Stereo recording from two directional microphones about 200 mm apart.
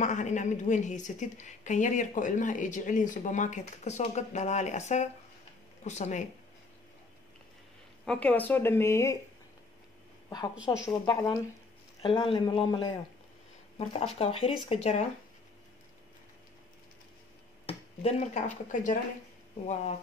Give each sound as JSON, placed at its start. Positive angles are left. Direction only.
{"t": 0.0, "sound": "a woman's voice", "side_deg": 35}
{"t": 8.0, "sound": "speech", "side_deg": 5}
{"t": 10.5, "sound": "a woman's voice", "side_deg": -5}
{"t": 10.9, "sound": "speech", "side_deg": 25}
{"t": 14.1, "sound": "a woman's voice", "side_deg": 30}
{"t": 17.6, "sound": "a woman's voice", "side_deg": 35}